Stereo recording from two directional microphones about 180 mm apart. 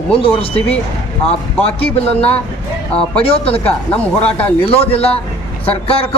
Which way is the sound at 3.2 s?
30° left (ahead or behind).